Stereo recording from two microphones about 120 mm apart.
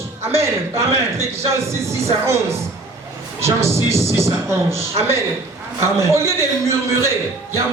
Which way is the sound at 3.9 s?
25° right (ahead or behind).